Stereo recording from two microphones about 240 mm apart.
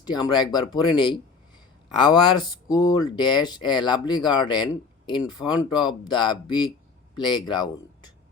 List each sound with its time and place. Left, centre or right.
0.0 s speech: centre